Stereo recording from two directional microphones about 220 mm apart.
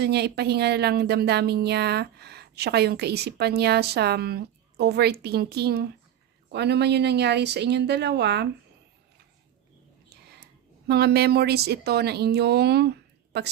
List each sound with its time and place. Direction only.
0.0 s a woman's voice: 50° right (ahead or behind)
10.1 s a sound: 45° right (ahead or behind)
10.8 s a woman's voice: 45° right (ahead or behind)